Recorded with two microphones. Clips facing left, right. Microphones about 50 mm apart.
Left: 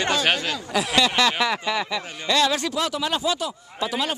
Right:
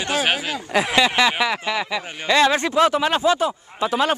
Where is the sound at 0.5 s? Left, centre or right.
Right; by 2.0 s centre.